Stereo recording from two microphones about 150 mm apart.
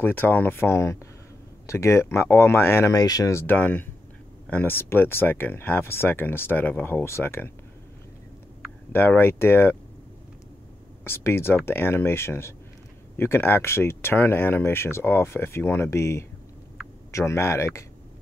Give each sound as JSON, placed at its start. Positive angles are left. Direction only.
{"t": 0.0, "sound": "speech", "side_deg": 15}
{"t": 8.9, "sound": "speech", "side_deg": 15}
{"t": 11.1, "sound": "speech", "side_deg": 15}